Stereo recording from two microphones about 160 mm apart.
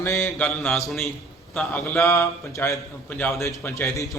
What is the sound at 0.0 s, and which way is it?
Speech, 15° left (ahead or behind).